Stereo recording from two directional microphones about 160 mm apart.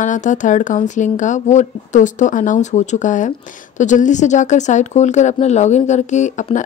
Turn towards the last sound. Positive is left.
turn(degrees=50)  # may be behind; listen again after turning